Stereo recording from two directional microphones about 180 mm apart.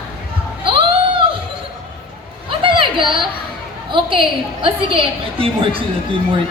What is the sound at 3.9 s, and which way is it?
A woman's voice, 30° right (ahead or behind).